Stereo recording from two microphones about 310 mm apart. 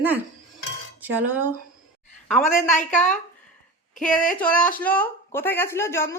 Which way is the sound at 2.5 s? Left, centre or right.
Left.